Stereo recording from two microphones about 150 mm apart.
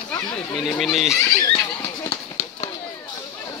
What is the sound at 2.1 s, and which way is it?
Run, 20° left (ahead or behind).